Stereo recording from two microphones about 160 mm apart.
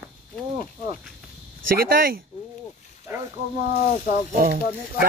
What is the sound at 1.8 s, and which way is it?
Speech, 70° right (ahead or behind).